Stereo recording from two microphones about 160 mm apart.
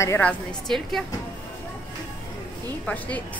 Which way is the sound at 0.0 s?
10° left (ahead or behind).